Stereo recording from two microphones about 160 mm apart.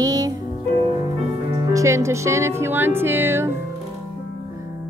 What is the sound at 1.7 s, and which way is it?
Music, 20° right (ahead or behind).